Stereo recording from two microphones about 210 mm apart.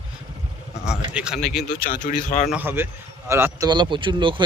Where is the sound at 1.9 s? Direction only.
35° left (ahead or behind).